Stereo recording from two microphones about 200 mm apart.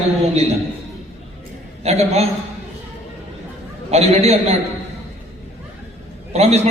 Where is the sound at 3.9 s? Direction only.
30° right (ahead or behind).